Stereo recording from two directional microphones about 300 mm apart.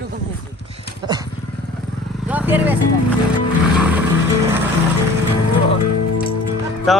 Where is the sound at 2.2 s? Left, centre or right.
Centre.